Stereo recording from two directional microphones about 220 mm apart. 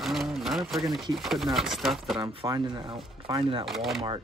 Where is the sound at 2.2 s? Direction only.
25° right (ahead or behind).